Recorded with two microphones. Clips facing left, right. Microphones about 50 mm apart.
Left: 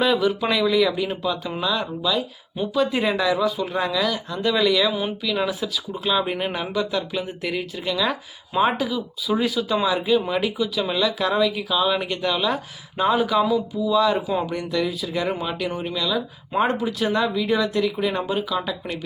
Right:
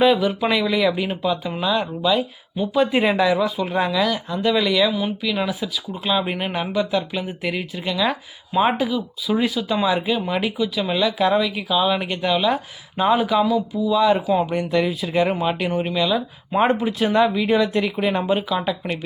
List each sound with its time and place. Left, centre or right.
0.0 s speech: centre
4.9 s speech: centre
5.2 s speech: centre
13.4 s speech: centre
13.9 s speech: centre
14.7 s speech: right